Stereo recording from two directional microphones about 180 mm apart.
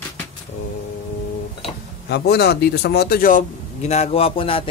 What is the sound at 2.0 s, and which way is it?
Speech, 65° left (ahead or behind).